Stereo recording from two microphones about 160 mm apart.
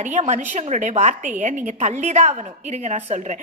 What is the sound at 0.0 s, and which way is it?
A woman's voice, 50° right (ahead or behind).